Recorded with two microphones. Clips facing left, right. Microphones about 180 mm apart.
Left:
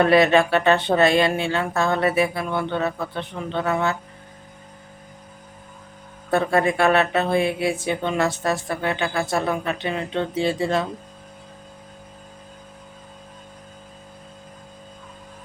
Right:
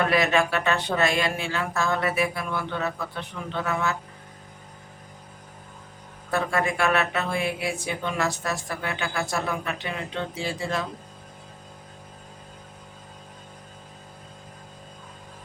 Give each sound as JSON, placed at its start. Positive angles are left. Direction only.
{"t": 0.0, "sound": "speech", "side_deg": 30}
{"t": 6.3, "sound": "speech", "side_deg": 30}